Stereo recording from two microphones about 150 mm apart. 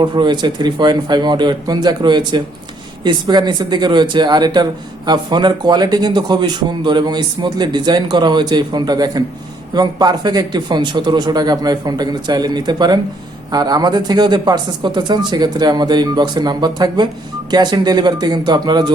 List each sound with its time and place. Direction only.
0.0 s speech: 30° right (ahead or behind)